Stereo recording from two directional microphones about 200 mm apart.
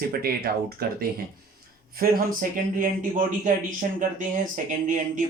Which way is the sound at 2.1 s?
45° right (ahead or behind).